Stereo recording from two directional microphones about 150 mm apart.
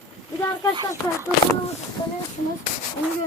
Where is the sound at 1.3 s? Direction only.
10° right (ahead or behind).